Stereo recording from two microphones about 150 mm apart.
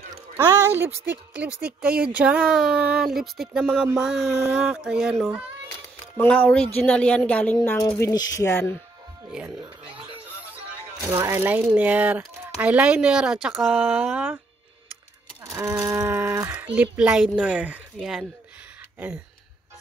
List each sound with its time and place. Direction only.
0.5 s speech: 20° right (ahead or behind)
6.1 s speech: 10° left (ahead or behind)
8.0 s speech: 25° left (ahead or behind)
11.1 s speech: 20° right (ahead or behind)
15.5 s speech: 20° right (ahead or behind); by 18.2 s 5° right (ahead or behind)